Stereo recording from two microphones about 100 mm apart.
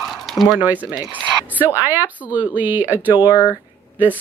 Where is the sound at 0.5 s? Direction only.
15° right (ahead or behind).